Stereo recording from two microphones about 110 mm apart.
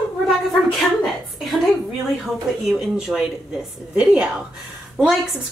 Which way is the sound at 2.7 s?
5° right (ahead or behind).